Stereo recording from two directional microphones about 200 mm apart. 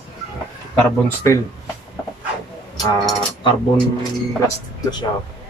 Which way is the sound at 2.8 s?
20° left (ahead or behind).